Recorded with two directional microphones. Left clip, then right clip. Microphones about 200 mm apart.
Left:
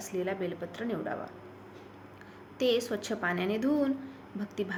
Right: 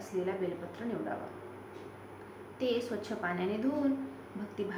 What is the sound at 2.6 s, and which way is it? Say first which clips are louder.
Speech: left 5 dB; 55° left (ahead or behind).